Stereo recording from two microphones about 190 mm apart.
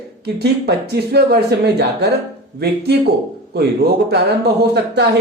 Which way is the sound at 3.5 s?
60° right (ahead or behind).